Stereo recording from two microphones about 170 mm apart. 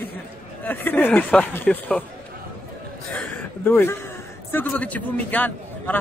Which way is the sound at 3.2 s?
10° left (ahead or behind).